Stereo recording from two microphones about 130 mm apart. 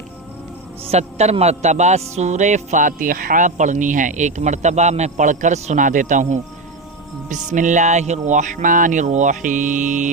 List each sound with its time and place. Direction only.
0.9 s a man's voice: 55° right (ahead or behind); by 10.1 s 75° right (ahead or behind)